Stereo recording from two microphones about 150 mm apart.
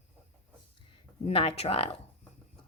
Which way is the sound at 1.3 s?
40° left (ahead or behind).